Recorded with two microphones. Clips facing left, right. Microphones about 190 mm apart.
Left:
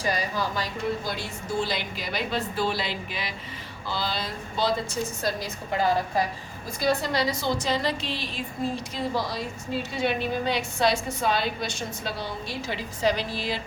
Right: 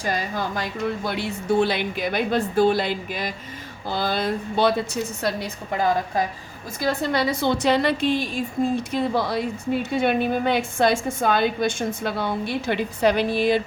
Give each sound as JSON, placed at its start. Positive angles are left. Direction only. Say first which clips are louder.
{"t": 0.0, "sound": "a woman's voice", "louder": "right 2 dB", "side_deg": -50}
{"t": 6.8, "sound": "a woman's voice", "louder": "right 2 dB", "side_deg": -55}